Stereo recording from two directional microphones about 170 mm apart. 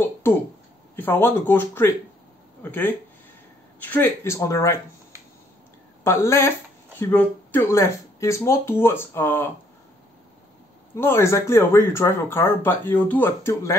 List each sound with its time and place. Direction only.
0.0 s a sound: 15° left (ahead or behind)
0.9 s speech: 10° left (ahead or behind)
6.0 s speech: 15° left (ahead or behind)
11.0 s speech: 15° left (ahead or behind)